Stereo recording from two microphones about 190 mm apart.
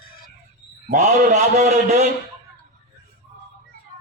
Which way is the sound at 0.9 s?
40° right (ahead or behind).